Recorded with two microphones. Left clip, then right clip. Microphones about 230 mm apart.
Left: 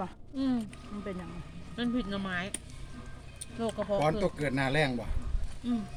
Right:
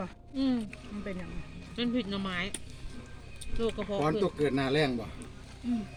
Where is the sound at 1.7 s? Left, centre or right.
Left.